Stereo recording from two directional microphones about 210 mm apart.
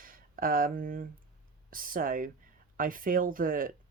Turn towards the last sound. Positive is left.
turn(degrees=-40)  # may be behind; listen again after turning